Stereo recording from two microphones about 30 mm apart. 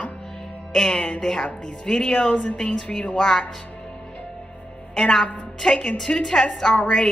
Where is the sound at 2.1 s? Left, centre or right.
Left.